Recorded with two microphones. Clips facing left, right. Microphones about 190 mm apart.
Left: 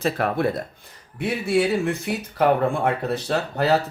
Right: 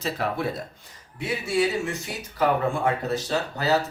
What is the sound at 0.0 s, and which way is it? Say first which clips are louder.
Speech: left 5 dB; 55° left (ahead or behind).